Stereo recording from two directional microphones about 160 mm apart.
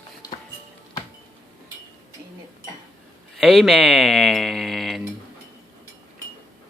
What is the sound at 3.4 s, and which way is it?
Speech, centre (ahead or behind).